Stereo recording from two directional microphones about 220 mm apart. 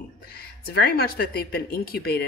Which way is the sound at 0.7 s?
45° left (ahead or behind).